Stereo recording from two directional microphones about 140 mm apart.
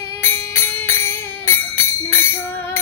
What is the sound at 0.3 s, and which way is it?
Music, 15° left (ahead or behind).